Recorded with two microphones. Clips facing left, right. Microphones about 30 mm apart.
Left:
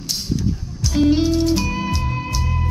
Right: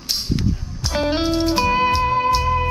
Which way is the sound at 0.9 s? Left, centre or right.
Right.